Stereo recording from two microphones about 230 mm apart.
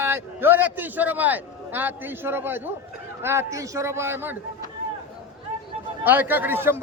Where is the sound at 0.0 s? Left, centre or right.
Centre.